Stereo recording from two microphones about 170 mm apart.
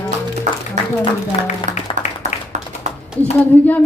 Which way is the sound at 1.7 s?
45° right (ahead or behind).